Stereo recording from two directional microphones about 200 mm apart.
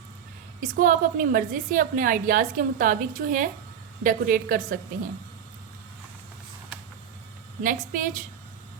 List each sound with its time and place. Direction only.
0.6 s a woman's voice: 40° right (ahead or behind)
7.6 s a woman's voice: 45° right (ahead or behind)